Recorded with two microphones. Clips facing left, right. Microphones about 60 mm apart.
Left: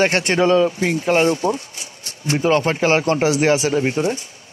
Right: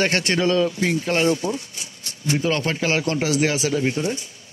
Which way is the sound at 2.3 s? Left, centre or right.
Left.